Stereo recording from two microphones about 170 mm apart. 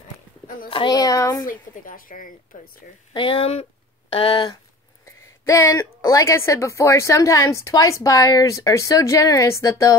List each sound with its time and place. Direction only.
0.7 s speech: 25° left (ahead or behind)
1.4 s a woman's voice: 55° left (ahead or behind)
3.1 s speech: 30° left (ahead or behind)
5.4 s speech: 20° left (ahead or behind)